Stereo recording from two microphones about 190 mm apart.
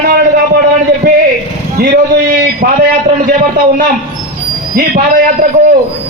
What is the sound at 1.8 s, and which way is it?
Speech, 50° right (ahead or behind).